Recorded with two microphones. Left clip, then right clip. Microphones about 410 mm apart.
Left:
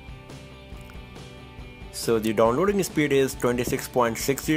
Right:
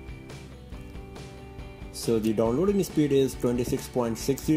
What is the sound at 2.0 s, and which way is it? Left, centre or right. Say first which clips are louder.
Speech: left 4 dB; centre.